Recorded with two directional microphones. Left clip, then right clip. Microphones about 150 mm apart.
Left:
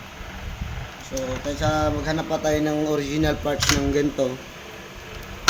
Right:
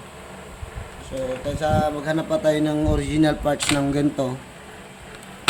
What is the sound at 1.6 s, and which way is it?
Speech, 30° right (ahead or behind).